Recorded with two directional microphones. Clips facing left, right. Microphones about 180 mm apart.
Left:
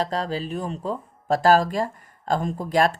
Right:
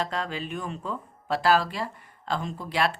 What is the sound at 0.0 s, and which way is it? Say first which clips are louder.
Speech: left 5 dB; 35° left (ahead or behind).